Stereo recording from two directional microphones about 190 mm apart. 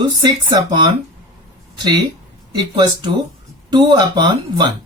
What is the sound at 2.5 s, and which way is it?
Speech, 25° right (ahead or behind).